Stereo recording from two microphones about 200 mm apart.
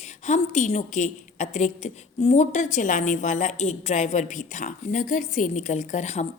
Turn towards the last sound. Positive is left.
turn(degrees=35)  # may be behind; listen again after turning